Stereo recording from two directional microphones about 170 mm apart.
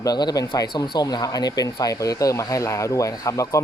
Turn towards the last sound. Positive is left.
turn(degrees=20)  # may be behind; listen again after turning